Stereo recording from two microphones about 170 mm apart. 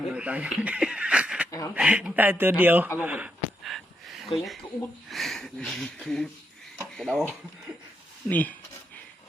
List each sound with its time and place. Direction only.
0.1 s speech: 10° right (ahead or behind)
1.5 s a sound: 20° left (ahead or behind)
1.7 s speech: 10° right (ahead or behind)
3.0 s a sound: 5° right (ahead or behind)
5.0 s speech: centre (ahead or behind)
8.3 s speech: 10° left (ahead or behind)